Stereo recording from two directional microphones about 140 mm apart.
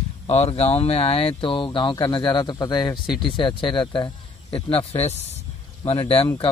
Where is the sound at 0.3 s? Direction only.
50° left (ahead or behind).